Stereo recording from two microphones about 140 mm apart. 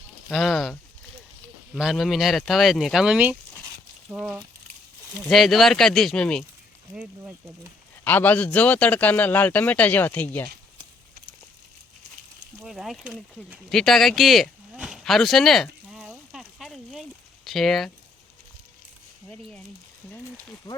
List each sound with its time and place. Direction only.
0.3 s speech: centre (ahead or behind)
8.0 s speech: 10° left (ahead or behind)
12.6 s speech: centre (ahead or behind)
13.7 s a sound: 5° left (ahead or behind)
19.3 s speech: 5° left (ahead or behind)
20.7 s speech: 30° left (ahead or behind)